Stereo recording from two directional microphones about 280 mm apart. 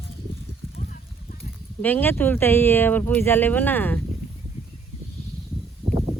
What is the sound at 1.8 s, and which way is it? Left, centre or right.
Speech, centre.